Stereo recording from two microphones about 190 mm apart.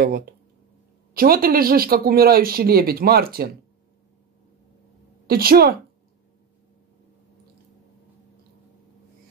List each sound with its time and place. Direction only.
0.0 s speech: 50° right (ahead or behind)
5.2 s a woman's voice: 50° right (ahead or behind)